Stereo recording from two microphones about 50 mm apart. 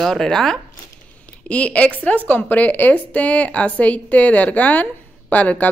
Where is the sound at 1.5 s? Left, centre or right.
Left.